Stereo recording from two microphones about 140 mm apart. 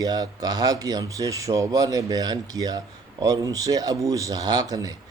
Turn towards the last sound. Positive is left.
turn(degrees=-25)  # may be behind; listen again after turning